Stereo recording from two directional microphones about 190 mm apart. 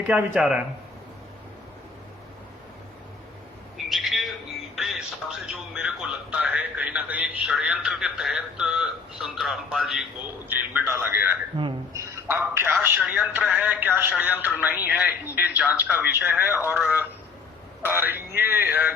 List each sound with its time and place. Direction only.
0.1 s speech: 5° right (ahead or behind)
3.8 s music: centre (ahead or behind)
5.5 s a man's voice: 5° right (ahead or behind)
11.5 s a sound: 25° right (ahead or behind)
12.1 s speech: 10° right (ahead or behind)